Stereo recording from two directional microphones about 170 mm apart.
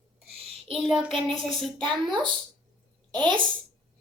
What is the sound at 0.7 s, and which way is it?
Child singing, centre (ahead or behind).